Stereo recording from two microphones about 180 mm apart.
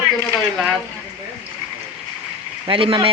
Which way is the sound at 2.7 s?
30° right (ahead or behind).